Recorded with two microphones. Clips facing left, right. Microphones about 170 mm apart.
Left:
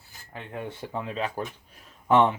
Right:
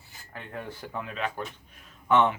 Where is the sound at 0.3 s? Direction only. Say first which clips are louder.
Left 3 dB; 20° left (ahead or behind).